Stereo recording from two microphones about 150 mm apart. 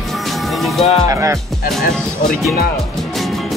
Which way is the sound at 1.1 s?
20° right (ahead or behind).